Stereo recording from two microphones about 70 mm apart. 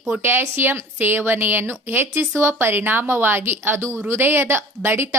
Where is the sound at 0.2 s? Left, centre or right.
Right.